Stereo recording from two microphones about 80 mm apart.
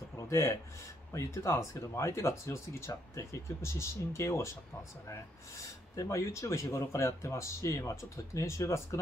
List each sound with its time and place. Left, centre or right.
0.1 s a sound: left
1.1 s speech: left
5.9 s speech: left